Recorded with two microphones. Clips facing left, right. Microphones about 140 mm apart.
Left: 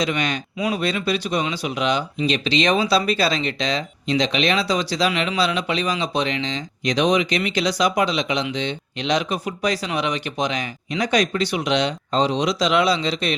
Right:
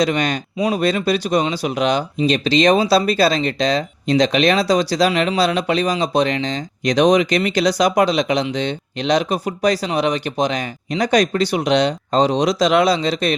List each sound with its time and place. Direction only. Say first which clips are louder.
0.0 s speech: right 5 dB; 40° right (ahead or behind)